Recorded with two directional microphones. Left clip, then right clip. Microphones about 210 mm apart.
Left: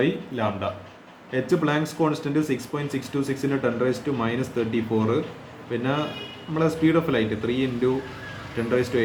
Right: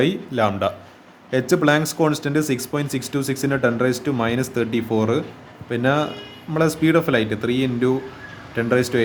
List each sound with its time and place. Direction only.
0.0 s speech: 55° right (ahead or behind)